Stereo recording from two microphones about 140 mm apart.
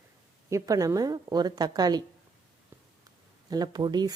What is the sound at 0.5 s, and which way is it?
Speech, 25° right (ahead or behind).